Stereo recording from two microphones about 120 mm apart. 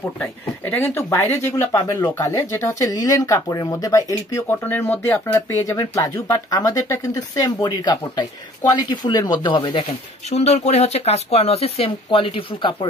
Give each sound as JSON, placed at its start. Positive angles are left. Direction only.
{"t": 0.2, "sound": "speech", "side_deg": 15}
{"t": 1.7, "sound": "speech", "side_deg": 30}
{"t": 4.6, "sound": "speech", "side_deg": 15}
{"t": 10.3, "sound": "speech", "side_deg": 70}